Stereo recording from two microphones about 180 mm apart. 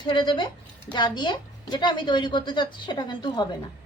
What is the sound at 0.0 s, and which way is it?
A woman's voice, 25° left (ahead or behind).